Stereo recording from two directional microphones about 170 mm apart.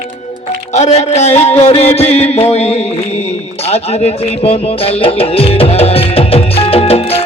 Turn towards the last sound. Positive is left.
turn(degrees=35)  # may be behind; listen again after turning